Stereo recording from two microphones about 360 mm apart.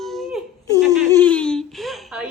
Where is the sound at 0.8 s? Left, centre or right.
Centre.